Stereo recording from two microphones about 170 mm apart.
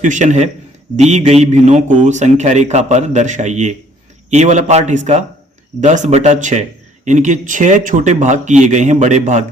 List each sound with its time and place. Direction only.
0.0 s a man's voice: 45° right (ahead or behind)